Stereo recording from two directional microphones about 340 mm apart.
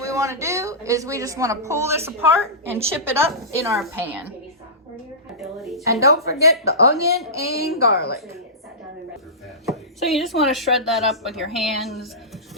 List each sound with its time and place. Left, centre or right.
0.0 s a woman's voice: centre
5.4 s a woman's voice: centre
7.8 s speech: left
9.6 s speech: centre